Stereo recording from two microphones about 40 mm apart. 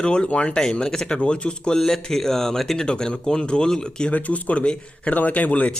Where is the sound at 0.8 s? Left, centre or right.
Centre.